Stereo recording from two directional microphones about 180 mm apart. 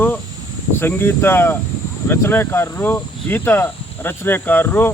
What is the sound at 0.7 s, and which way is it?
Speech, 10° left (ahead or behind).